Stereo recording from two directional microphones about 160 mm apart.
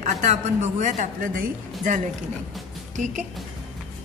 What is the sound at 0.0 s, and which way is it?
Speech, 45° right (ahead or behind).